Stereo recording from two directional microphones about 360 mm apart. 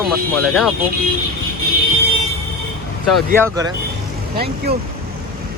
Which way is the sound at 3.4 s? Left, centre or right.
Centre.